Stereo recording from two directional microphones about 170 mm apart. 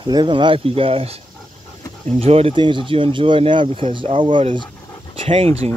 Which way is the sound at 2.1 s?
35° right (ahead or behind).